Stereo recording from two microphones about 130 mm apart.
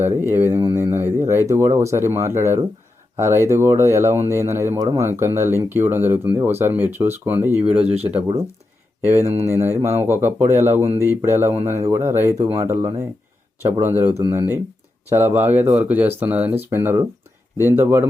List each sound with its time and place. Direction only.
0.0 s speech: 20° right (ahead or behind)
7.9 s speech: 50° right (ahead or behind)
9.0 s speech: 20° right (ahead or behind)